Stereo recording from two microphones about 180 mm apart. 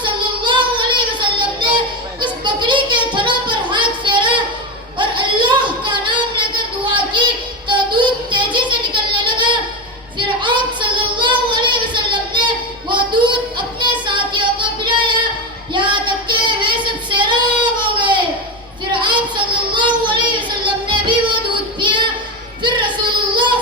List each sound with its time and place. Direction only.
0.0 s child singing: 25° right (ahead or behind)
4.9 s a sound: 25° right (ahead or behind)
10.2 s child singing: 25° right (ahead or behind)
18.9 s a sound: 25° right (ahead or behind)
19.7 s child singing: 25° right (ahead or behind)
23.3 s child singing: 25° right (ahead or behind)